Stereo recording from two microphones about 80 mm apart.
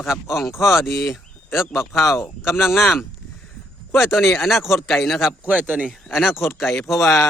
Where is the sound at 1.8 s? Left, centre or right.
Left.